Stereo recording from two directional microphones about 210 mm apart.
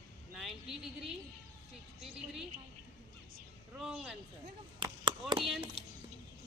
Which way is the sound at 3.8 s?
Centre (ahead or behind).